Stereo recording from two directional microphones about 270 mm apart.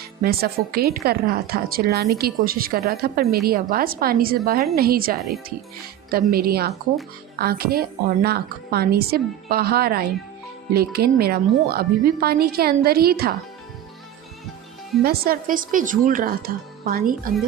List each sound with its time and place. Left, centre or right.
0.2 s a woman's voice: right
15.0 s a woman's voice: right